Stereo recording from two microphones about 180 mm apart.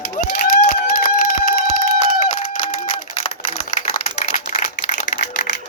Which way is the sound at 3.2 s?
35° left (ahead or behind).